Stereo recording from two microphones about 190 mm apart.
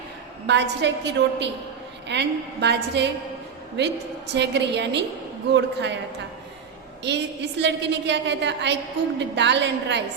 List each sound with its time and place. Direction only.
0.4 s a woman's voice: 70° right (ahead or behind)
7.6 s a woman's voice: 65° right (ahead or behind)